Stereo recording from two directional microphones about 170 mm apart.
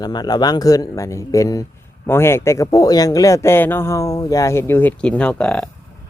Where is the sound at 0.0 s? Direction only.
25° left (ahead or behind); by 5.6 s 5° left (ahead or behind).